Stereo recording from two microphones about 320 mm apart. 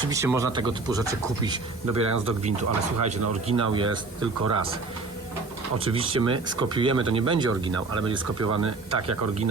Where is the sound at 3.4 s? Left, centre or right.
Centre.